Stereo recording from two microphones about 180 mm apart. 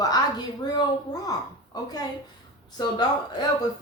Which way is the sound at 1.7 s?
20° left (ahead or behind).